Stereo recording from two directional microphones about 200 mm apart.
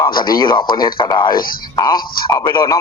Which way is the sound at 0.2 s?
20° left (ahead or behind).